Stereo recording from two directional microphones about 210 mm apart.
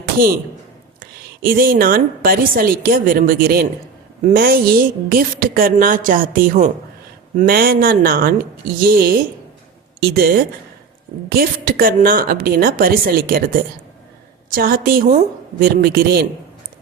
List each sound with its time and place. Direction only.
0.0 s a sound: 45° right (ahead or behind)
1.4 s a woman's voice: 45° right (ahead or behind)
14.5 s a woman's voice: 45° right (ahead or behind)